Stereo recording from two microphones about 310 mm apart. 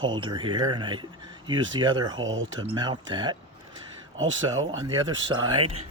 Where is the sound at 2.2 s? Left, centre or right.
Right.